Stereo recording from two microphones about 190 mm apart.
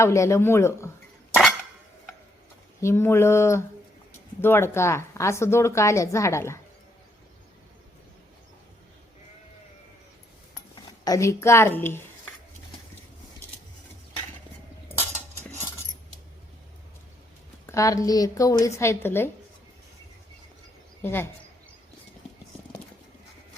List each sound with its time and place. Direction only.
0.0 s a woman's voice: 15° left (ahead or behind)
1.3 s a sound: centre (ahead or behind)
2.8 s a woman's voice: 15° left (ahead or behind)
11.0 s a woman's voice: 15° left (ahead or behind)
17.7 s a woman's voice: 15° left (ahead or behind)
21.0 s a woman's voice: 10° left (ahead or behind)